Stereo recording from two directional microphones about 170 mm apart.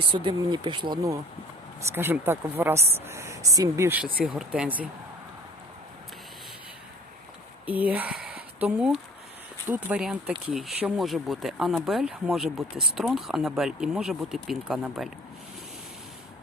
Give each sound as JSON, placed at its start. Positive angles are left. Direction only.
{"t": 0.1, "sound": "speech", "side_deg": -30}
{"t": 1.9, "sound": "speech", "side_deg": -15}
{"t": 7.7, "sound": "speech", "side_deg": -10}